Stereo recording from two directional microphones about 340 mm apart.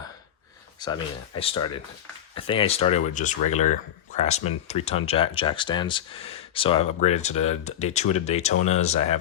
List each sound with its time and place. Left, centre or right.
0.8 s speech: centre